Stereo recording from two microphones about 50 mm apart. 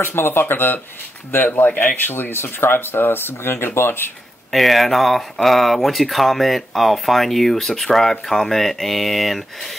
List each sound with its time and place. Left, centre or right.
0.0 s speech: left
4.5 s speech: centre